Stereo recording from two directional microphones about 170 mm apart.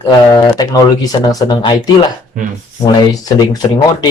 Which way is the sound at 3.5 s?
25° left (ahead or behind).